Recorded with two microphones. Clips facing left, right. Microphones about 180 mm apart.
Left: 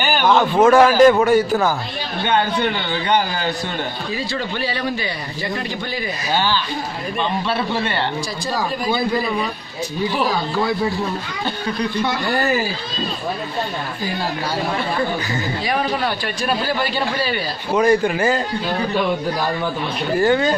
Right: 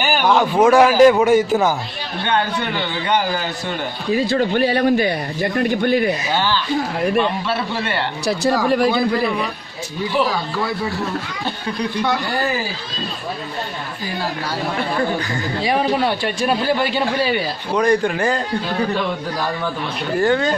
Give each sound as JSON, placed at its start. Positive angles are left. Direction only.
{"t": 0.0, "sound": "a man's voice", "side_deg": -10}
{"t": 4.1, "sound": "speech", "side_deg": -50}
{"t": 6.3, "sound": "speech", "side_deg": 10}
{"t": 8.3, "sound": "speech", "side_deg": -65}
{"t": 15.6, "sound": "speech", "side_deg": -25}
{"t": 17.7, "sound": "speech", "side_deg": 5}
{"t": 20.2, "sound": "speech", "side_deg": 5}